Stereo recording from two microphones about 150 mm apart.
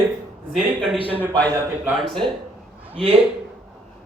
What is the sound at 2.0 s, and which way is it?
Speech, centre (ahead or behind).